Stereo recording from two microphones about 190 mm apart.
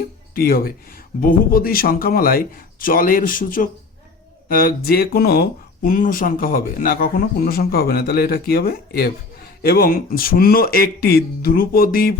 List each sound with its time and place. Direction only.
0.3 s speech: 50° left (ahead or behind)